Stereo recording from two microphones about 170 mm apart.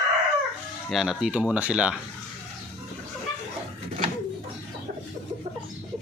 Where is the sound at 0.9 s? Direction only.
Centre (ahead or behind).